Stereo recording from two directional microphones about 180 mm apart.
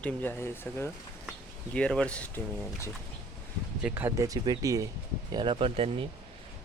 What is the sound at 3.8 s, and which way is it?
Speech, 10° right (ahead or behind).